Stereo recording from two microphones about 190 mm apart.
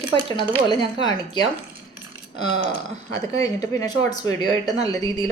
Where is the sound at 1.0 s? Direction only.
25° left (ahead or behind).